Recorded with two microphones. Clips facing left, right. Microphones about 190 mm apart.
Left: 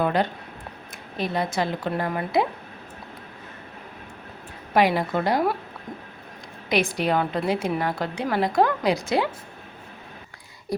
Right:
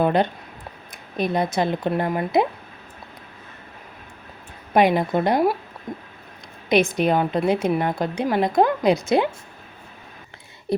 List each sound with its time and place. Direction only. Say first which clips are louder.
0.0 s a woman's voice: right 3 dB; 20° right (ahead or behind)
4.7 s a woman's voice: right 3 dB; 20° right (ahead or behind)
6.7 s a woman's voice: right 4 dB; 20° right (ahead or behind)
10.7 s a sound: right 5 dB; 25° right (ahead or behind)